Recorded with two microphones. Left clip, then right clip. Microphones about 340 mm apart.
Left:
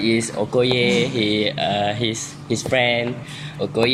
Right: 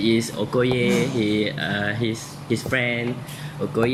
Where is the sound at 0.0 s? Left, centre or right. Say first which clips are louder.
Left 2 dB; centre.